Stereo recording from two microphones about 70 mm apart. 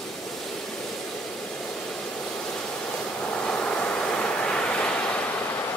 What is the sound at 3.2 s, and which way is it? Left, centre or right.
Waves, centre.